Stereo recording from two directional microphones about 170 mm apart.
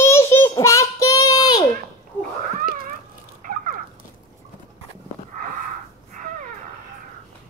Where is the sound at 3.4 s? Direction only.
55° right (ahead or behind).